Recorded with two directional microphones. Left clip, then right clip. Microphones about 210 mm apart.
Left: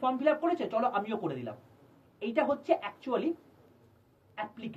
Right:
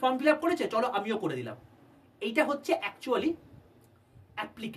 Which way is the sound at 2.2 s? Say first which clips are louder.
Right 1 dB; 15° right (ahead or behind).